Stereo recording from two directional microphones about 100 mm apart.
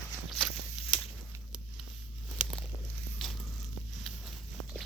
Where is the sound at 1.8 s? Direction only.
5° right (ahead or behind).